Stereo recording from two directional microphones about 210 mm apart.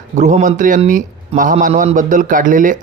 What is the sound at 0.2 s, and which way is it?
Speech, 35° right (ahead or behind).